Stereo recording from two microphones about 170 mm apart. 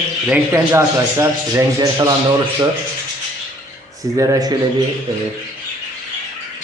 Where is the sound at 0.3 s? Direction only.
15° right (ahead or behind).